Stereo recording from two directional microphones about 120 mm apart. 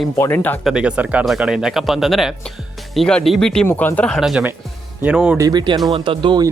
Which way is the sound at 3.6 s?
20° left (ahead or behind).